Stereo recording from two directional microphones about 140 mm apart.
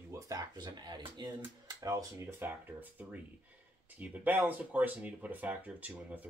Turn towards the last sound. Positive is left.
turn(degrees=-10)  # may be behind; listen again after turning